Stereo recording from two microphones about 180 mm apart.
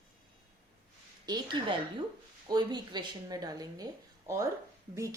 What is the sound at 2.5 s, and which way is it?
A woman's voice, 25° right (ahead or behind).